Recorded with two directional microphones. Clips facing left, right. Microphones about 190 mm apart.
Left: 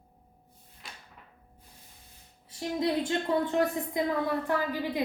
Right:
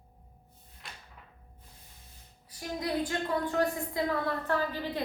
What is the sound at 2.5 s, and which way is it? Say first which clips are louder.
A woman's voice: left 4 dB; 25° left (ahead or behind).